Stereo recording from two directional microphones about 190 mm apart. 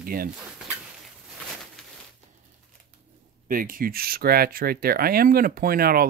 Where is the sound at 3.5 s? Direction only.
45° right (ahead or behind).